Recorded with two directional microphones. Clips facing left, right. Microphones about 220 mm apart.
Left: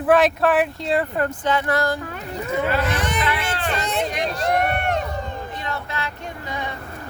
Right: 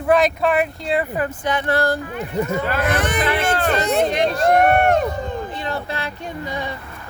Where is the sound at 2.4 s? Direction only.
50° right (ahead or behind).